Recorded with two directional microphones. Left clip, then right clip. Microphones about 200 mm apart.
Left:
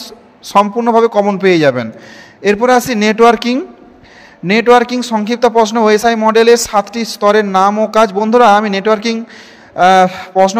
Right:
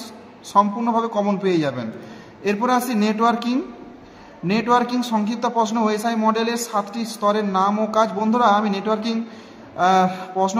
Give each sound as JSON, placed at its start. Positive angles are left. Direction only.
{"t": 0.0, "sound": "a man's voice", "side_deg": 40}